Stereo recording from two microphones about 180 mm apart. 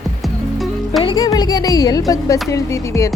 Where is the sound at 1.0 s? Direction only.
25° left (ahead or behind).